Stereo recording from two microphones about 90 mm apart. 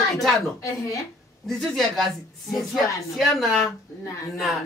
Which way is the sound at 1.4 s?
Centre (ahead or behind).